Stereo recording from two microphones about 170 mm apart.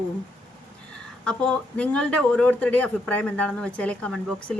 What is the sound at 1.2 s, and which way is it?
Speech, 5° left (ahead or behind).